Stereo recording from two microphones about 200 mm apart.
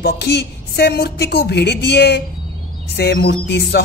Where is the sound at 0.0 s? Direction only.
60° left (ahead or behind).